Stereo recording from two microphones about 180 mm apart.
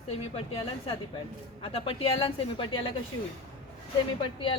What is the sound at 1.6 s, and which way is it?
A woman's voice, 30° left (ahead or behind).